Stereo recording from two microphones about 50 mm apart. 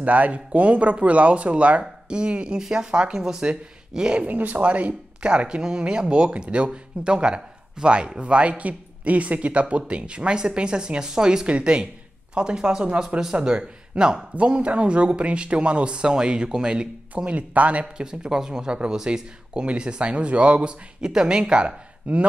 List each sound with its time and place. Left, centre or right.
0.0 s speech: right
4.3 s speech: right
17.9 s speech: centre